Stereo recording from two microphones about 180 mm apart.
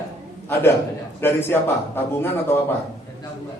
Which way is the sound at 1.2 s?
10° left (ahead or behind).